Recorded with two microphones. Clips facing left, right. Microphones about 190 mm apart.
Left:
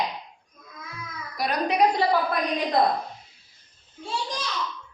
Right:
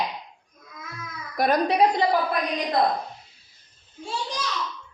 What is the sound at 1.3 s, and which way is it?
Speech, 50° right (ahead or behind).